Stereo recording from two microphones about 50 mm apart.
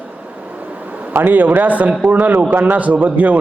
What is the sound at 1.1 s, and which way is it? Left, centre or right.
A man's voice, right.